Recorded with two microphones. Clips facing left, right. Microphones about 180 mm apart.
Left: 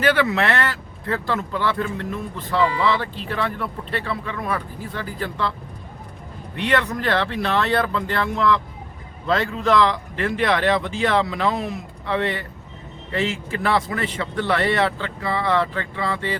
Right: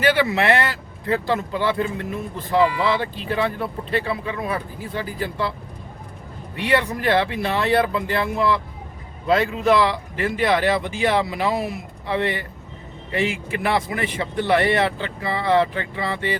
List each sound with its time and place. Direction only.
0.0 s speech: 10° right (ahead or behind)
4.9 s speech: 15° right (ahead or behind)
6.6 s speech: 10° right (ahead or behind)